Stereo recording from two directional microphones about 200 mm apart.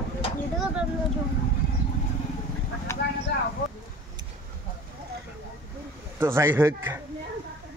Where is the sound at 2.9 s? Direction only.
15° left (ahead or behind).